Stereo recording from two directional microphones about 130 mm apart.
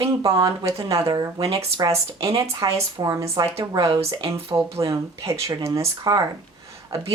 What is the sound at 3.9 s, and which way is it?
Speech, 45° right (ahead or behind).